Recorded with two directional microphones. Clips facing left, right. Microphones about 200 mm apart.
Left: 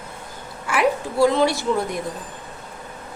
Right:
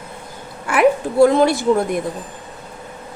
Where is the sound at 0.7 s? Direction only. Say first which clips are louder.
Right 6 dB; 50° right (ahead or behind).